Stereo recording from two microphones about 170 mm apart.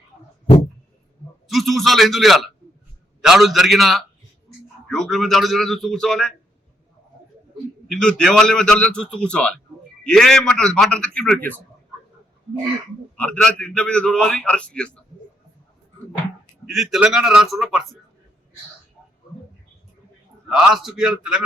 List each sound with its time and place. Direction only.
1.5 s a man's voice: centre (ahead or behind)
7.9 s a man's voice: 5° left (ahead or behind)
13.1 s a man's voice: 5° left (ahead or behind)
16.6 s a man's voice: centre (ahead or behind)
20.5 s a man's voice: 5° right (ahead or behind)